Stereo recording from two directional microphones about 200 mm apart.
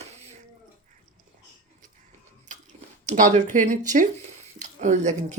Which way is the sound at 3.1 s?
35° right (ahead or behind).